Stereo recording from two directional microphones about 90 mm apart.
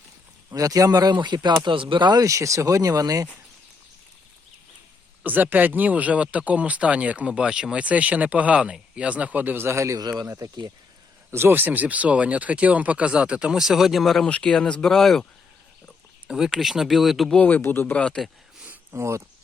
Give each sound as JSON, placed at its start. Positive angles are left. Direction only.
{"t": 0.5, "sound": "speech", "side_deg": -40}
{"t": 1.6, "sound": "speech", "side_deg": -70}
{"t": 2.2, "sound": "speech", "side_deg": -35}
{"t": 5.2, "sound": "speech", "side_deg": -20}
{"t": 10.0, "sound": "speech", "side_deg": -50}
{"t": 10.2, "sound": "speech", "side_deg": -35}
{"t": 14.3, "sound": "speech", "side_deg": 10}
{"t": 16.2, "sound": "speech", "side_deg": -10}
{"t": 17.3, "sound": "speech", "side_deg": 15}
{"t": 18.6, "sound": "a sound", "side_deg": -20}
{"t": 18.9, "sound": "speech", "side_deg": -30}